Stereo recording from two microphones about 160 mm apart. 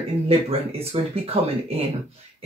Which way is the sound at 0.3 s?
35° right (ahead or behind).